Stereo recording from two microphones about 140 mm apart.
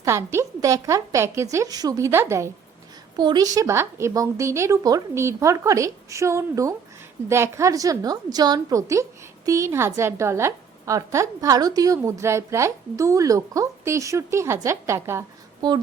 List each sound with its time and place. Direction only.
0.0 s a woman's voice: 20° right (ahead or behind)